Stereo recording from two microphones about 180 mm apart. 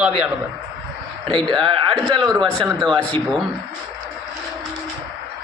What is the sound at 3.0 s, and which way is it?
Speech, 5° left (ahead or behind).